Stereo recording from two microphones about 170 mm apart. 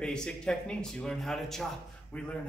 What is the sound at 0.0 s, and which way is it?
A man's voice, 5° left (ahead or behind).